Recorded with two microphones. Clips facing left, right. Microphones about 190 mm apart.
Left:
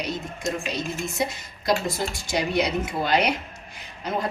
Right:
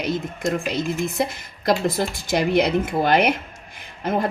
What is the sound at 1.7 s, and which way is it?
Speech, 55° right (ahead or behind).